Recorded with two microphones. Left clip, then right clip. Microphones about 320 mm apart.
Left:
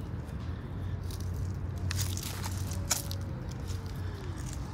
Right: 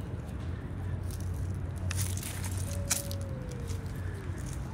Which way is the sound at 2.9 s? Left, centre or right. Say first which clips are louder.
Left 1 dB; centre.